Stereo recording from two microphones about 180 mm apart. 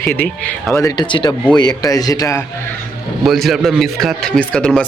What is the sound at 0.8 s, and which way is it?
A man's voice, 25° left (ahead or behind).